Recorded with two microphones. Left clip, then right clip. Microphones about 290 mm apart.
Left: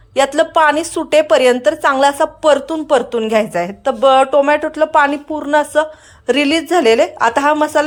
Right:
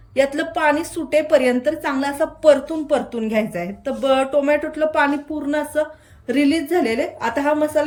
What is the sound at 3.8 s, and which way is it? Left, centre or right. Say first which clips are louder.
A woman's voice: left 8 dB; centre.